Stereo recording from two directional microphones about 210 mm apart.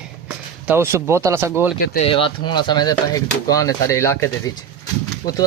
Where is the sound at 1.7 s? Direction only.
45° left (ahead or behind).